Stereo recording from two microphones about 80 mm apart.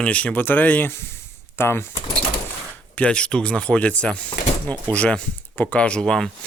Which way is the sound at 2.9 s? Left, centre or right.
Centre.